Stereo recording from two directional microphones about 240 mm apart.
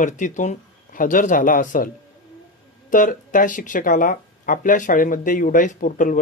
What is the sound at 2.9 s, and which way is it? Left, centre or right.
Speech, left.